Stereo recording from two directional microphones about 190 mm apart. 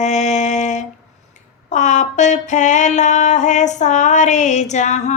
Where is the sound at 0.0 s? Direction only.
40° left (ahead or behind).